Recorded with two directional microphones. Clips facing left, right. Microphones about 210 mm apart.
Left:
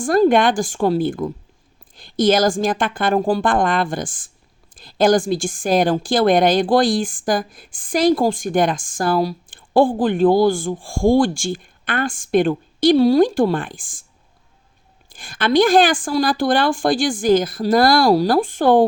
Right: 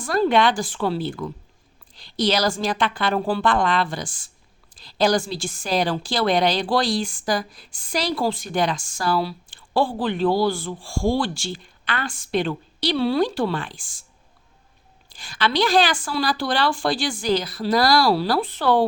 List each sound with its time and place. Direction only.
0.0 s a woman's voice: 50° left (ahead or behind)
15.1 s a woman's voice: 50° left (ahead or behind)